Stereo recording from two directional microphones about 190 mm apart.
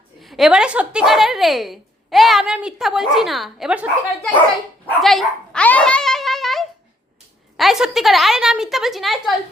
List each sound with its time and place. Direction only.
0.2 s a woman's voice: centre (ahead or behind)
4.9 s dog: centre (ahead or behind)
7.5 s a woman's voice: centre (ahead or behind)